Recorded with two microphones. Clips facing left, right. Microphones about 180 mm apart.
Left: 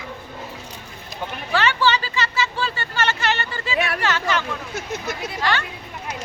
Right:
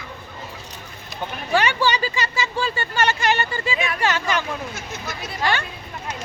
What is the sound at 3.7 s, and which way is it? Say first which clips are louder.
Speech: left 6 dB; 65° left (ahead or behind).